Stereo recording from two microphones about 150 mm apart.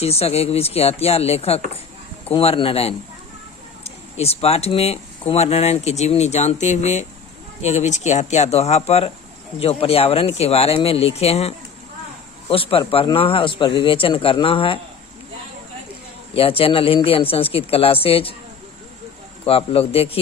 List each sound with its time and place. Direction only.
0.0 s speech: 45° left (ahead or behind)
16.3 s speech: 40° left (ahead or behind)
19.5 s speech: 40° left (ahead or behind)